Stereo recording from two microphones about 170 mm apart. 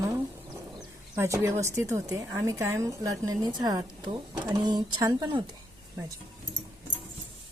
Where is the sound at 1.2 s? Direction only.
20° right (ahead or behind).